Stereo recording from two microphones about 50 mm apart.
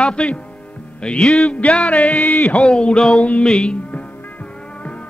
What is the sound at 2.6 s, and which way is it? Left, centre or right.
Speech, centre.